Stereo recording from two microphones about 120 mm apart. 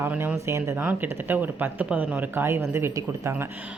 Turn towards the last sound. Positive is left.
turn(degrees=-20)  # may be behind; listen again after turning